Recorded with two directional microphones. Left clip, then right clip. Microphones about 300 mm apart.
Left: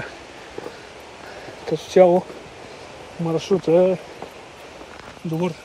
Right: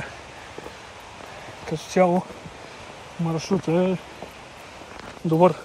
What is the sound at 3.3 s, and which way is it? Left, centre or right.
Speech, left.